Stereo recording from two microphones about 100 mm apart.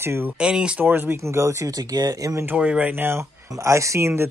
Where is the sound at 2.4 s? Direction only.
10° right (ahead or behind).